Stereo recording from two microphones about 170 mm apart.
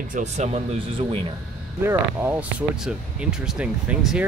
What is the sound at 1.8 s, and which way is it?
Speech, 10° right (ahead or behind).